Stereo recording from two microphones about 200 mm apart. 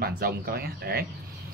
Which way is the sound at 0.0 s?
50° right (ahead or behind).